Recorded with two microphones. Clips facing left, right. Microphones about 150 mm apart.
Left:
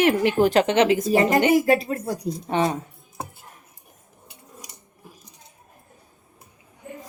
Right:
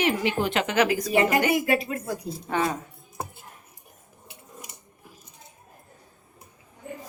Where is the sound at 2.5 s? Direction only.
25° left (ahead or behind).